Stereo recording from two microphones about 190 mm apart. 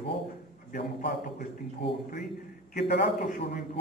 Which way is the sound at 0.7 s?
55° left (ahead or behind).